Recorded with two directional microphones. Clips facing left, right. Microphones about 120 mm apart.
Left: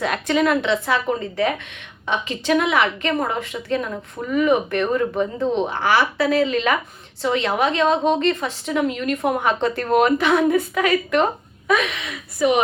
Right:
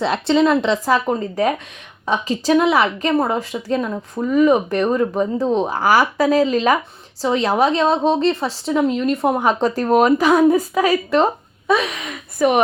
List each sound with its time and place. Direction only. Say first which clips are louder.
0.0 s a woman's voice: right 4 dB; 30° right (ahead or behind); by 12.5 s 50° right (ahead or behind)